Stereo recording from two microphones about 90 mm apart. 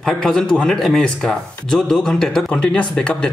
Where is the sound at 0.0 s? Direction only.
5° left (ahead or behind).